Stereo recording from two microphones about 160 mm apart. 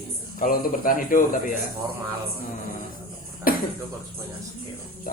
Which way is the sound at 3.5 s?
60° left (ahead or behind).